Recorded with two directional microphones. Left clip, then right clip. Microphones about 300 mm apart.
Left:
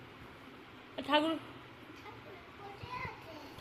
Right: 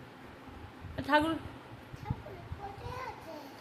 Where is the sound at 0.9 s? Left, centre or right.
Right.